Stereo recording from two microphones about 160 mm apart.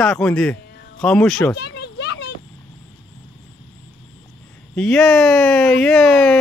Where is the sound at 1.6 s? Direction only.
90° left.